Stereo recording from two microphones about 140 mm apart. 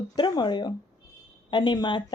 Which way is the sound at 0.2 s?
35° left (ahead or behind).